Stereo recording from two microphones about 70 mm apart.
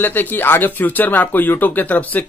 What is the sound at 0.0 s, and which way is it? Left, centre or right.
Speech, left.